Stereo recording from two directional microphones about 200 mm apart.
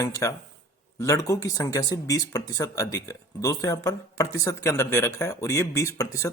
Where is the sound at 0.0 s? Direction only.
15° left (ahead or behind).